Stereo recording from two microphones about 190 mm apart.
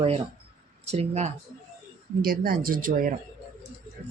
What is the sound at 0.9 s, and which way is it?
Speech, 35° right (ahead or behind).